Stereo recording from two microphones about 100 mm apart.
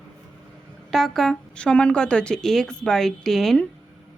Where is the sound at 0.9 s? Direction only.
5° left (ahead or behind).